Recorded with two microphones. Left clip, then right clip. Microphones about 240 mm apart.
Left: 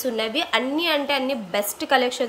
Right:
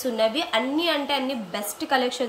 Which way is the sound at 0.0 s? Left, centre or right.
Centre.